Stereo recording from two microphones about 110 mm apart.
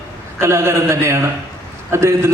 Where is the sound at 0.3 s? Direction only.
25° right (ahead or behind).